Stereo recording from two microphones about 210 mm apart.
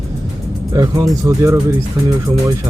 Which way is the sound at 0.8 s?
15° right (ahead or behind).